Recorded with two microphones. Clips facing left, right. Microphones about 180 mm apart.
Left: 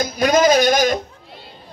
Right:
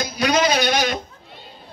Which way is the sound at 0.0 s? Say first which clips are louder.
Left 4 dB; 45° left (ahead or behind).